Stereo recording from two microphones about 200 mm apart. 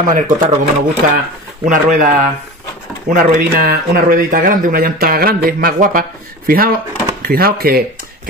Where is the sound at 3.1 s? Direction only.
45° right (ahead or behind).